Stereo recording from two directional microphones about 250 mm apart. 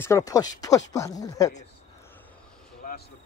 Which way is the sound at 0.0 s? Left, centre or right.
Centre.